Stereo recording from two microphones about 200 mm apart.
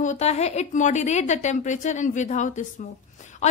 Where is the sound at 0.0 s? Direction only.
35° left (ahead or behind).